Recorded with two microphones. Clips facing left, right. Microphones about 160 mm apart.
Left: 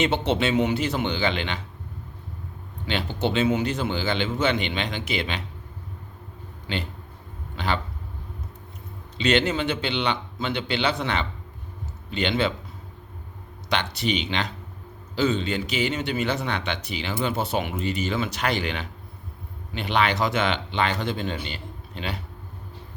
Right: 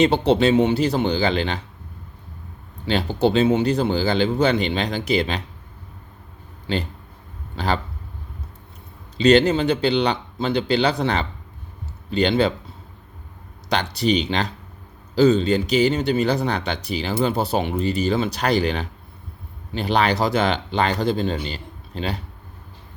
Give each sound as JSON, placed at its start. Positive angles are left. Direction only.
{"t": 0.0, "sound": "speech", "side_deg": -35}
{"t": 2.8, "sound": "speech", "side_deg": -40}
{"t": 6.7, "sound": "speech", "side_deg": -35}
{"t": 9.1, "sound": "speech", "side_deg": -40}
{"t": 13.7, "sound": "speech", "side_deg": -35}